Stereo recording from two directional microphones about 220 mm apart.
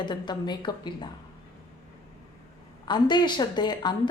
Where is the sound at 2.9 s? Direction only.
20° left (ahead or behind).